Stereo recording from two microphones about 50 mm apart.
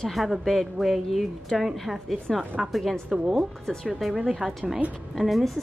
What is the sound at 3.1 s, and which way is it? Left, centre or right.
A woman's voice, centre.